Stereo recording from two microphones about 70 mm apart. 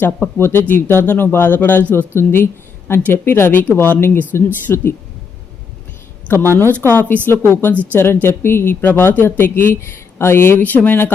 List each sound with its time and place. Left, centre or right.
0.0 s a woman's voice: left
6.2 s a woman's voice: left
6.8 s a woman's voice: left